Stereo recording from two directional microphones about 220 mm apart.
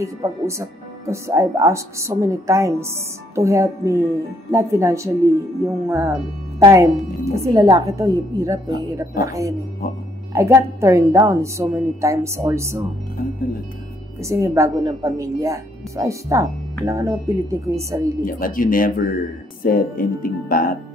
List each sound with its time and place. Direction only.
0.0 s a woman's voice: 15° right (ahead or behind)
14.2 s a woman's voice: 15° right (ahead or behind)
18.2 s speech: 40° left (ahead or behind)